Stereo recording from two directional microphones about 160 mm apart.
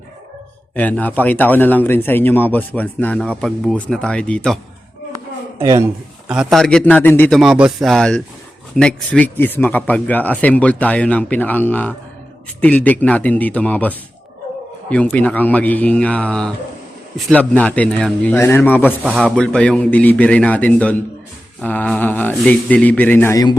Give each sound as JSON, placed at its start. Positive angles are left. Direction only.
{"t": 0.8, "sound": "speech", "side_deg": 10}
{"t": 5.6, "sound": "a man's voice", "side_deg": -20}
{"t": 6.2, "sound": "a man's voice", "side_deg": -5}
{"t": 7.3, "sound": "a man's voice", "side_deg": -5}